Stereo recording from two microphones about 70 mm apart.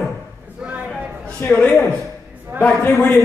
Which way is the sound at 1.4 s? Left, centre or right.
Left.